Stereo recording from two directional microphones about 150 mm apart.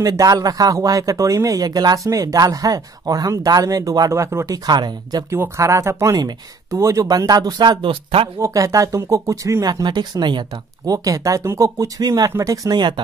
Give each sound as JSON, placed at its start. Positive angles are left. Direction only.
{"t": 0.0, "sound": "speech", "side_deg": -25}
{"t": 8.4, "sound": "speech", "side_deg": -20}